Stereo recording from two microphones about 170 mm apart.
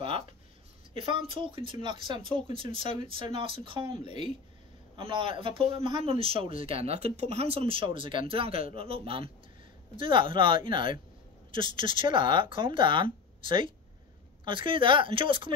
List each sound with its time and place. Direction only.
0.9 s speech: 30° right (ahead or behind)
4.9 s speech: 30° right (ahead or behind)